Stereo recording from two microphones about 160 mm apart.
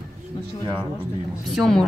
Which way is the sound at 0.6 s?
30° right (ahead or behind).